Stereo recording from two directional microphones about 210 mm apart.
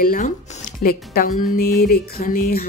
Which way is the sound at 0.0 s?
40° left (ahead or behind).